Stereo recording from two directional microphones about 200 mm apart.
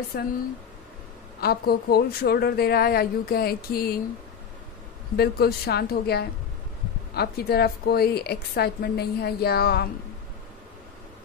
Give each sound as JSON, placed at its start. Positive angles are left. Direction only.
{"t": 0.1, "sound": "a woman's voice", "side_deg": 50}
{"t": 1.4, "sound": "a woman's voice", "side_deg": 50}
{"t": 5.1, "sound": "a woman's voice", "side_deg": 50}